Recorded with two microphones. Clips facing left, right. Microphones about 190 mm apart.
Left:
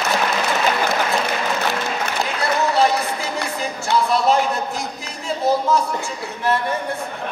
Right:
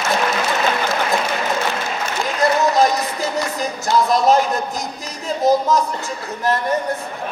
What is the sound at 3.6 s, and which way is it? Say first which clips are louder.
Music: right 2 dB; 40° right (ahead or behind).